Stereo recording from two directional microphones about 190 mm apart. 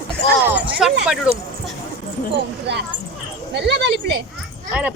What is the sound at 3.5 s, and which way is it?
Speech, 65° right (ahead or behind).